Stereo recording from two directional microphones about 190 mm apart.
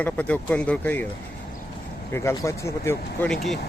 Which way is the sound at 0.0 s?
10° left (ahead or behind).